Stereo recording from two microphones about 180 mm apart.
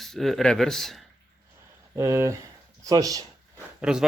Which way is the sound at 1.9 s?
15° right (ahead or behind).